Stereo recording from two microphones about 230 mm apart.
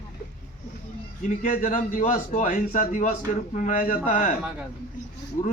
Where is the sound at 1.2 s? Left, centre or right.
Left.